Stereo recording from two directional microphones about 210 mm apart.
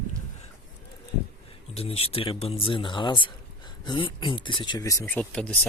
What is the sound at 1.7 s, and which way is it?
Speech, 30° left (ahead or behind).